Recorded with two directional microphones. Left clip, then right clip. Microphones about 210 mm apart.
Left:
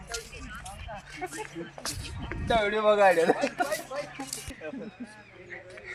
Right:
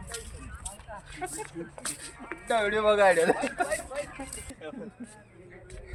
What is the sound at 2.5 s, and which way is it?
Speech, 20° left (ahead or behind).